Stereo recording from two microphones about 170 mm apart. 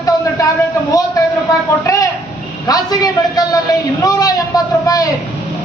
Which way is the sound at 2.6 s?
20° left (ahead or behind).